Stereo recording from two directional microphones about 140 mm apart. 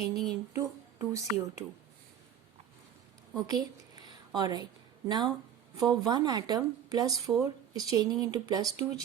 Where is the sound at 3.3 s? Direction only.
30° right (ahead or behind).